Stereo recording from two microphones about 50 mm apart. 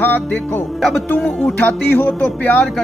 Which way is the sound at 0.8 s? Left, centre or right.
Centre.